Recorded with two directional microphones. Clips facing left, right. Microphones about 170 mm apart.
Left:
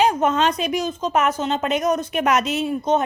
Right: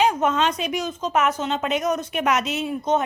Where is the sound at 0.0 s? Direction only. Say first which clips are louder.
Left 2 dB; 40° left (ahead or behind).